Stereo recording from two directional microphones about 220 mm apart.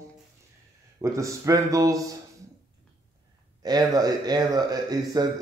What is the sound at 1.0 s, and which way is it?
A man's voice, 15° right (ahead or behind).